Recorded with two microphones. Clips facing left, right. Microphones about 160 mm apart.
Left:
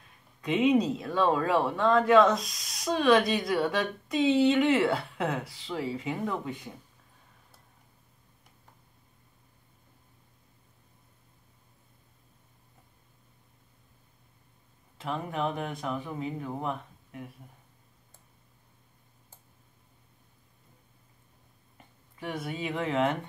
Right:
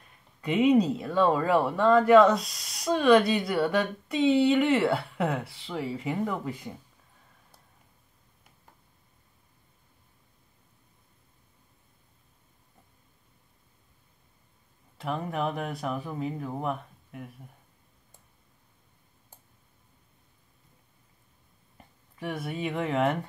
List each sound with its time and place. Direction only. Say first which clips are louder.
0.4 s speech: right 2 dB; centre (ahead or behind)
15.0 s speech: right 1 dB; centre (ahead or behind)
22.2 s speech: right 2 dB; centre (ahead or behind)